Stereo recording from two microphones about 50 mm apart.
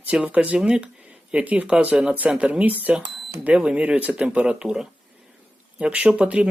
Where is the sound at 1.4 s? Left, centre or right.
Right.